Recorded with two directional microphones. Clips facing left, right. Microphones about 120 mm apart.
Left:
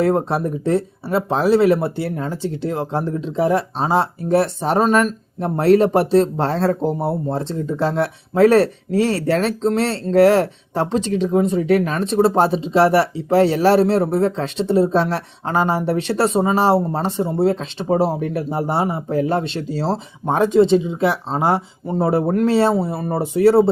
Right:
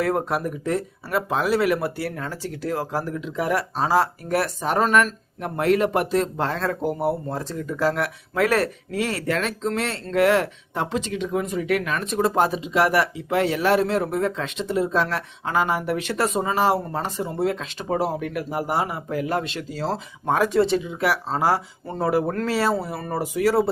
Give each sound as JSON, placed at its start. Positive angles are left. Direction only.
{"t": 0.0, "sound": "speech", "side_deg": 30}